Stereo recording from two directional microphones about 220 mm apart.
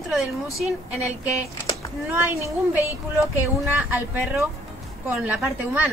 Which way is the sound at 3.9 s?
5° right (ahead or behind).